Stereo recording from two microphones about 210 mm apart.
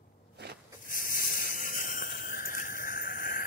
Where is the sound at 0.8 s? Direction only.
40° left (ahead or behind).